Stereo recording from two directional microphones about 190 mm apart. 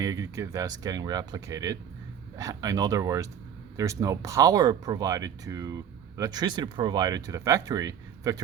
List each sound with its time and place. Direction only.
0.0 s speech: 15° right (ahead or behind)